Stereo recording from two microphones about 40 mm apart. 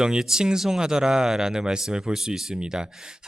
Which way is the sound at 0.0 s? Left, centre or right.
Centre.